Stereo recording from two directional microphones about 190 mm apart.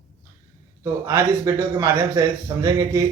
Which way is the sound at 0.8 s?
15° right (ahead or behind).